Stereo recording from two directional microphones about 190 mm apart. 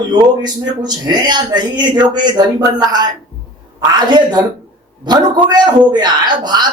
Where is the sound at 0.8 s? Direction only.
20° right (ahead or behind).